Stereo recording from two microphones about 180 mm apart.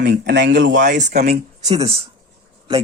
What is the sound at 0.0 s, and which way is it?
Speech, 75° right (ahead or behind).